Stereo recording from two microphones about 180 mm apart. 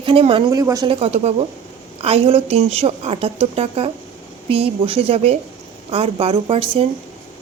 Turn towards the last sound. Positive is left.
turn(degrees=-30)  # may be behind; listen again after turning